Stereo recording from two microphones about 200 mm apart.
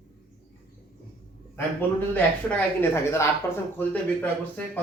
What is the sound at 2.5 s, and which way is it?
Speech, 10° left (ahead or behind).